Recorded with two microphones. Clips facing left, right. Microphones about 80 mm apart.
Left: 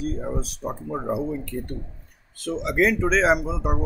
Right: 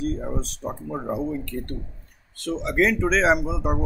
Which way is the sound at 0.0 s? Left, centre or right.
Centre.